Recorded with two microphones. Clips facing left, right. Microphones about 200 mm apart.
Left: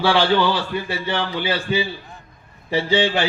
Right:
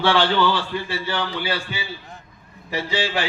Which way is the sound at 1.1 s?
25° left (ahead or behind).